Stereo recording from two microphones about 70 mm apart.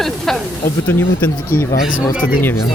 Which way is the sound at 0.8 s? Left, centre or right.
Left.